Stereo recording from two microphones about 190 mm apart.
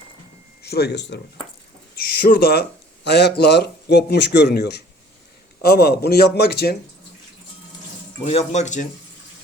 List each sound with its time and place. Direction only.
0.6 s speech: 60° left (ahead or behind)
2.0 s a man's voice: 55° left (ahead or behind)
8.2 s speech: 35° left (ahead or behind)